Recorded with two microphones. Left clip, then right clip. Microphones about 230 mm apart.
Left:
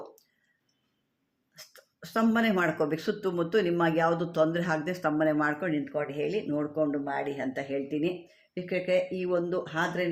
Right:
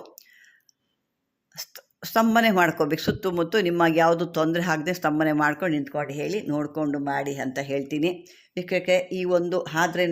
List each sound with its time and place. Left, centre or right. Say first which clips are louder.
1.5 s speech: right 10 dB; right